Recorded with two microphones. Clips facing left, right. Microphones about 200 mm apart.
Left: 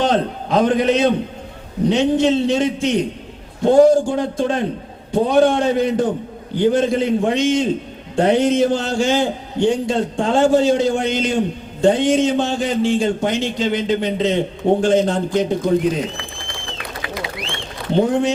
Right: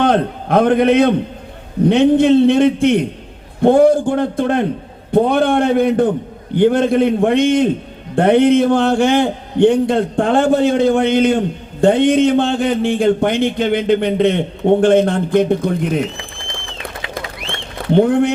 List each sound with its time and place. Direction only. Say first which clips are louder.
0.0 s a man's voice: right 3 dB; 55° right (ahead or behind)
17.9 s a man's voice: right 4 dB; 60° right (ahead or behind)